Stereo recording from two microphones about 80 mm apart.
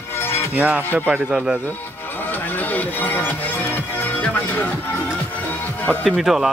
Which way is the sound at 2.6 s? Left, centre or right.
Left.